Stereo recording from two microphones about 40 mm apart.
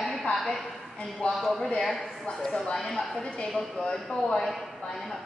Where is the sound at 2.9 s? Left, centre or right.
Left.